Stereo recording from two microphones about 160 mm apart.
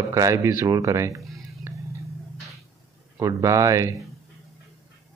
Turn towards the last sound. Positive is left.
turn(degrees=-20)  # may be behind; listen again after turning